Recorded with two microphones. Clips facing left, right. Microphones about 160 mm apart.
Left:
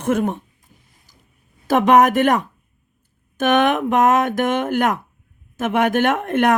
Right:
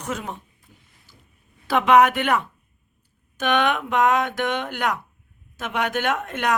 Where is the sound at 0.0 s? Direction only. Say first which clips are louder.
Left 11 dB; 50° left (ahead or behind).